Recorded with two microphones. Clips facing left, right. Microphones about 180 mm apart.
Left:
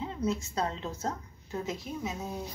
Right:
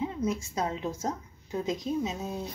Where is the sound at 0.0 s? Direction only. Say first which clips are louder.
Right 2 dB; 15° right (ahead or behind).